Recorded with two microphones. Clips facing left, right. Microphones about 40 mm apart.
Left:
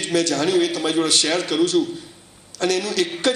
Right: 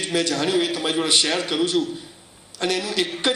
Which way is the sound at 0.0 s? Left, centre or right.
Right.